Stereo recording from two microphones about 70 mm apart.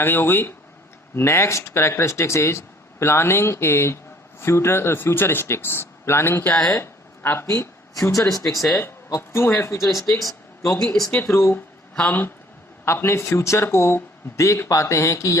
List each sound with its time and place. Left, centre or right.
0.0 s speech: left
6.7 s a sound: left
8.4 s speech: centre
9.0 s speech: left
10.2 s a sound: centre
10.8 s speech: centre
11.3 s speech: left
11.9 s speech: left
12.8 s speech: left